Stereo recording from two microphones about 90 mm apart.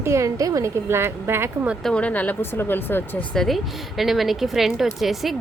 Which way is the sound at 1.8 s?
10° left (ahead or behind).